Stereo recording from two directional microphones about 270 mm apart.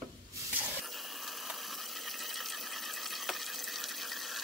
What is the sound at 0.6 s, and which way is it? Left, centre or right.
Toilet flush, centre.